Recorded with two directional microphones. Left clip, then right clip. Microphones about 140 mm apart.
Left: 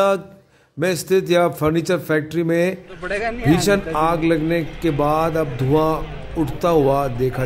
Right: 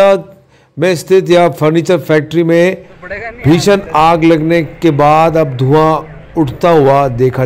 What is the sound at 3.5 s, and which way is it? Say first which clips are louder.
A man's voice: right 9 dB; 10° right (ahead or behind).